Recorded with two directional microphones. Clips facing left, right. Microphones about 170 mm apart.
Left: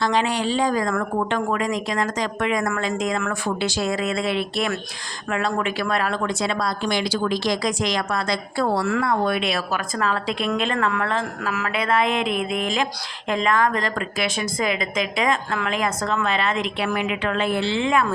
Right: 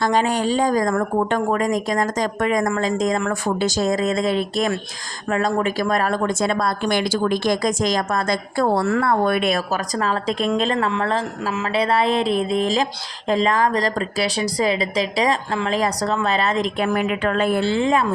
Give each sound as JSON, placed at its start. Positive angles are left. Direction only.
{"t": 0.0, "sound": "a woman's voice", "side_deg": -45}